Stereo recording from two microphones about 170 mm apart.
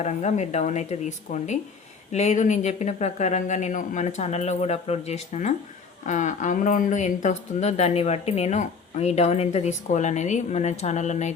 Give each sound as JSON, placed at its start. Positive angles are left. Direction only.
{"t": 0.0, "sound": "speech", "side_deg": 40}